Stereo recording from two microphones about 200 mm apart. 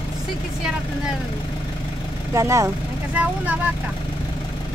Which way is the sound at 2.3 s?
15° right (ahead or behind).